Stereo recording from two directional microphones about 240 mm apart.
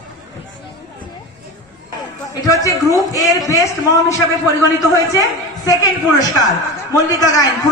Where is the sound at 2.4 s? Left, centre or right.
Centre.